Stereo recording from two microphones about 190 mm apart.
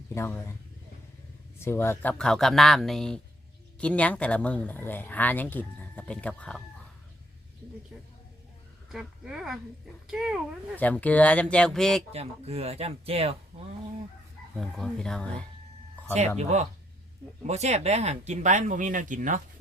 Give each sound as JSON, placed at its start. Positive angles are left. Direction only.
{"t": 0.1, "sound": "speech", "side_deg": 10}
{"t": 1.5, "sound": "speech", "side_deg": 15}
{"t": 8.9, "sound": "speech", "side_deg": -5}
{"t": 10.8, "sound": "speech", "side_deg": 10}
{"t": 12.1, "sound": "speech", "side_deg": -35}
{"t": 14.6, "sound": "speech", "side_deg": 0}
{"t": 16.4, "sound": "speech", "side_deg": -35}